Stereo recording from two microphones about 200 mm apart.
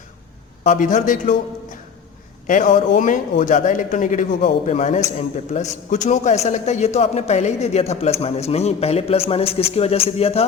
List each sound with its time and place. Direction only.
0.6 s a man's voice: 40° left (ahead or behind)